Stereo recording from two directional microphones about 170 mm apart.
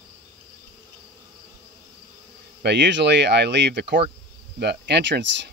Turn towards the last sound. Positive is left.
turn(degrees=-90)